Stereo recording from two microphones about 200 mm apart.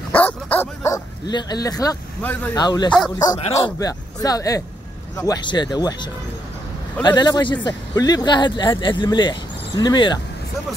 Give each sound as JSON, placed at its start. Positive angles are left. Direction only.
{"t": 0.1, "sound": "dog", "side_deg": 10}
{"t": 2.5, "sound": "a man's voice", "side_deg": 20}